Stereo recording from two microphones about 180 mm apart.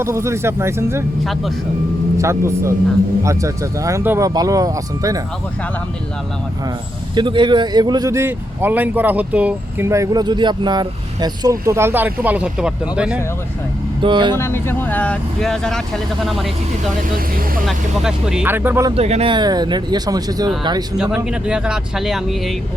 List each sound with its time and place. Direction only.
0.0 s speech: 15° right (ahead or behind)
2.1 s speech: 15° right (ahead or behind)
7.2 s speech: 25° right (ahead or behind); by 13.1 s 5° right (ahead or behind)
14.0 s speech: 25° right (ahead or behind)
14.3 s speech: 15° left (ahead or behind)
17.7 s speech: 5° right (ahead or behind)
18.9 s speech: 35° right (ahead or behind)
21.4 s speech: 5° right (ahead or behind)